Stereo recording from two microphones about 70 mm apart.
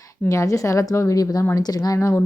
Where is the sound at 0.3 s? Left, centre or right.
Left.